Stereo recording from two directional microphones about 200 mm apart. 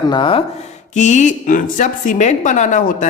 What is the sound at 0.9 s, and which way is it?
A woman's voice, 35° left (ahead or behind).